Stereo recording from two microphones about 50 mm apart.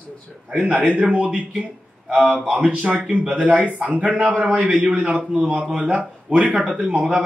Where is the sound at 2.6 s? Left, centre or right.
Right.